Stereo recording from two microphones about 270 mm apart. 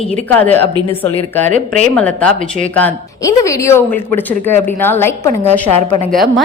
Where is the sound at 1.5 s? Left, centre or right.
Right.